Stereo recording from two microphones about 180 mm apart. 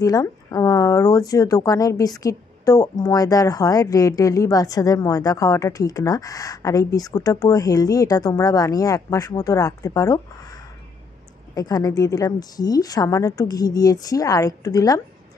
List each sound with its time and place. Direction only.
0.0 s speech: 20° left (ahead or behind)
11.5 s speech: 20° left (ahead or behind)